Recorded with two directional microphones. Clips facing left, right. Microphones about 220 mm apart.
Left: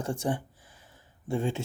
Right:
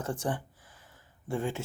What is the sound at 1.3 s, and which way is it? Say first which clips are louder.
Speech: left 3 dB; 25° left (ahead or behind).